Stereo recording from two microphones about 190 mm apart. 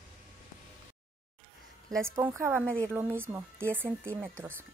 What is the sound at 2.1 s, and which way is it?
Speech, 20° right (ahead or behind).